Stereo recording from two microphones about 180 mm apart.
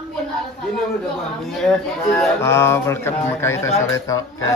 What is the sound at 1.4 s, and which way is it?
Speech, centre (ahead or behind).